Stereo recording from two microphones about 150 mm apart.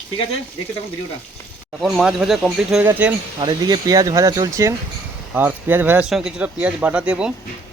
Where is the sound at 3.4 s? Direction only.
30° right (ahead or behind); by 6.1 s 10° right (ahead or behind).